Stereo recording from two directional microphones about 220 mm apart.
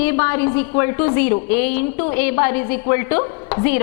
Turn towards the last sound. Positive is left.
turn(degrees=10)  # may be behind; listen again after turning